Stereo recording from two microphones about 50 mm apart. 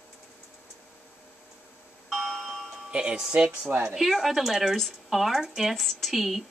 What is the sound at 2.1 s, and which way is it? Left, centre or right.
Doorbell, centre.